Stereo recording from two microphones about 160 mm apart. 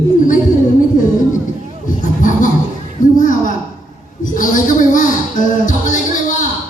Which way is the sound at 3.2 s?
55° left (ahead or behind).